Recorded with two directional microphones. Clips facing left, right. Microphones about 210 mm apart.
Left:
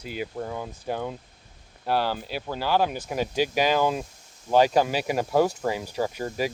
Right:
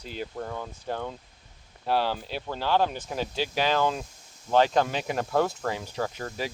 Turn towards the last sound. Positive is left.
turn(degrees=10)  # may be behind; listen again after turning